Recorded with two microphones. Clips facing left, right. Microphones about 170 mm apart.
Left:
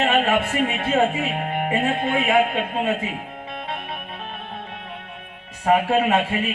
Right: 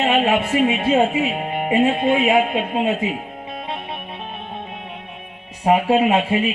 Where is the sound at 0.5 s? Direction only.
15° right (ahead or behind).